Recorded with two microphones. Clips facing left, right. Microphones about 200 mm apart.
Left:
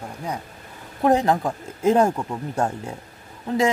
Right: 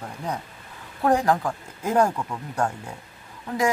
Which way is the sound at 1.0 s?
20° left (ahead or behind).